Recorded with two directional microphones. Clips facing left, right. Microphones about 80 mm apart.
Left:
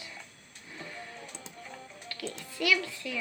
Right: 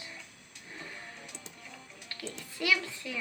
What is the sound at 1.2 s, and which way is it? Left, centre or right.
Music, left.